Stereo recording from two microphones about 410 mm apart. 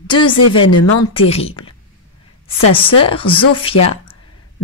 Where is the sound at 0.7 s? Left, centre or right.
Left.